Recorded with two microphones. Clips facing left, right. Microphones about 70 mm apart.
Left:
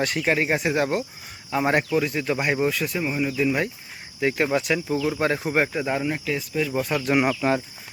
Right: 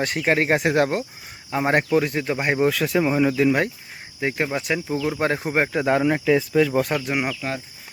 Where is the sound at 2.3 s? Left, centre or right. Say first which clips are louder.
Right 1 dB; right.